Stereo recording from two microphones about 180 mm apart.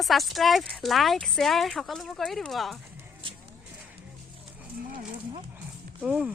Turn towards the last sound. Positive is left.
turn(degrees=-5)  # may be behind; listen again after turning